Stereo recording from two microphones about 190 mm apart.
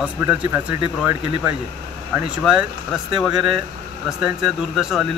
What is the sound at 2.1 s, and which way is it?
A man's voice, 5° right (ahead or behind).